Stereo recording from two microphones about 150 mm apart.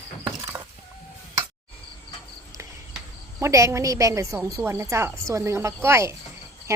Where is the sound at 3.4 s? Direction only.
20° right (ahead or behind).